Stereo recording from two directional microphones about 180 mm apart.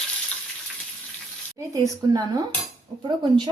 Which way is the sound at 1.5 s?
15° right (ahead or behind).